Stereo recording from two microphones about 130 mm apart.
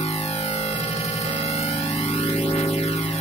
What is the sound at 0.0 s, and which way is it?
Music, 55° left (ahead or behind).